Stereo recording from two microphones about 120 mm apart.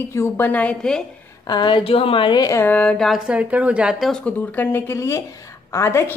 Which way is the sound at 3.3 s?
10° right (ahead or behind).